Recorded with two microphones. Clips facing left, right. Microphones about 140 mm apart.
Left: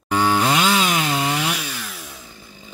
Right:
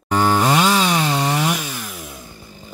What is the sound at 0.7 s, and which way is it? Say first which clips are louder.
Chainsaw: right 2 dB; 35° right (ahead or behind).